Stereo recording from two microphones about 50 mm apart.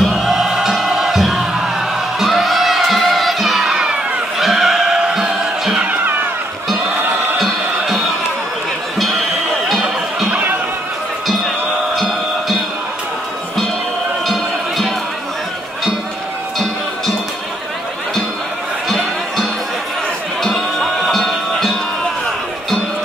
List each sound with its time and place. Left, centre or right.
0.0 s music: centre
5.8 s cat: right
7.3 s music: centre
9.7 s music: centre
14.2 s music: centre
20.4 s music: centre